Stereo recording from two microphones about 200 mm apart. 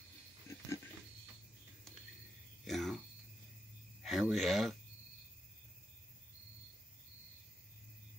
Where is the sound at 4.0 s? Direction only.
Centre (ahead or behind).